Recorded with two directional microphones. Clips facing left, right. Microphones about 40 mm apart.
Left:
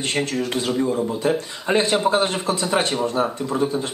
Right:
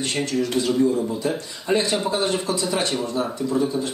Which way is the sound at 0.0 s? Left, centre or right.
Left.